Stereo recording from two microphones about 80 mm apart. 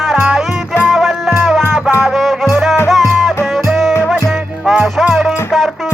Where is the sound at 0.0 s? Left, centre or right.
Centre.